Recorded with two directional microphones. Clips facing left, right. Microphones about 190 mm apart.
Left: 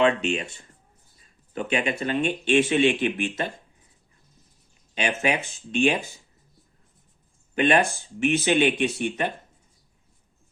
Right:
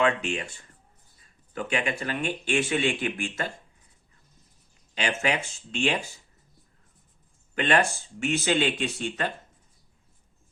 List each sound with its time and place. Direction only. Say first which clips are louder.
0.0 s speech: left 4 dB; 25° left (ahead or behind)
4.9 s speech: left 2 dB; 20° left (ahead or behind)
7.5 s speech: left 3 dB; 20° left (ahead or behind)